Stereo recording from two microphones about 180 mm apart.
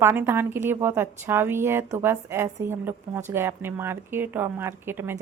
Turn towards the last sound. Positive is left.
turn(degrees=-10)  # may be behind; listen again after turning